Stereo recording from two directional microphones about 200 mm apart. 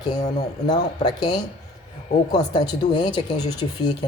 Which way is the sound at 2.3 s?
20° left (ahead or behind).